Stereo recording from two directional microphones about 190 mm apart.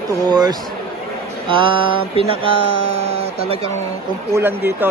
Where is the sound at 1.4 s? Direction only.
25° right (ahead or behind).